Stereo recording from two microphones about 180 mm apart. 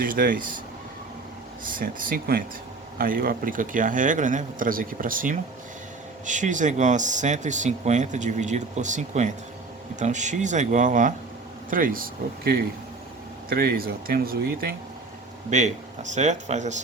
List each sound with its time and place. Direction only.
0.0 s speech: 50° right (ahead or behind)
1.6 s speech: 50° right (ahead or behind)
15.4 s speech: 40° right (ahead or behind)